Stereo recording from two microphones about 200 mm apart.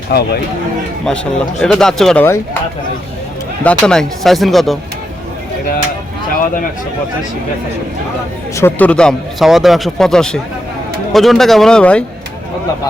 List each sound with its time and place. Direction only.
0.1 s speech: 55° left (ahead or behind)
1.0 s a man's voice: 5° left (ahead or behind)
3.6 s a man's voice: 5° left (ahead or behind)
8.5 s a man's voice: 10° left (ahead or behind)